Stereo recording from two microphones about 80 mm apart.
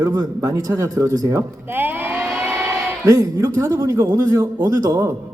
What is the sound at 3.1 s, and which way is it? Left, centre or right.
A man's voice, right.